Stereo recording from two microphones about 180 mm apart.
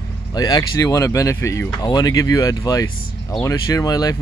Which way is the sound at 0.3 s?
20° left (ahead or behind).